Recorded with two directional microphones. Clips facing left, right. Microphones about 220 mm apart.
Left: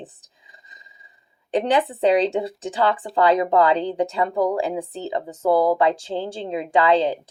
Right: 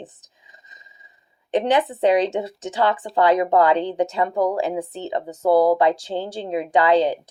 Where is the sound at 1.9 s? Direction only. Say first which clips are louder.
Even; 30° left (ahead or behind).